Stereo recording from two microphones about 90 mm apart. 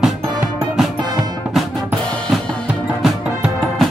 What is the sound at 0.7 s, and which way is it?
Music, 5° right (ahead or behind).